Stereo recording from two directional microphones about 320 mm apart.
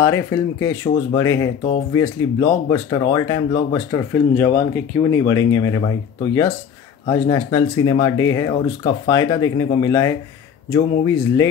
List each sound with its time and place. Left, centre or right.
0.0 s speech: centre